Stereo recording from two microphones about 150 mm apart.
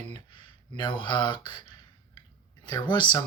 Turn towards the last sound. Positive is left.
turn(degrees=30)  # may be behind; listen again after turning